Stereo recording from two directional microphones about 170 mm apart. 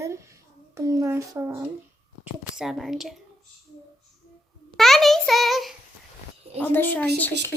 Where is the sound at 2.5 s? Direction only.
Centre (ahead or behind).